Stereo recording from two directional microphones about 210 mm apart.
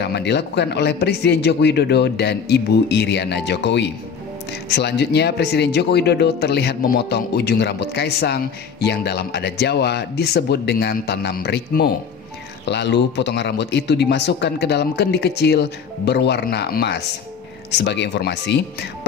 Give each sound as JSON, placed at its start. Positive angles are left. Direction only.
{"t": 0.0, "sound": "speech", "side_deg": 55}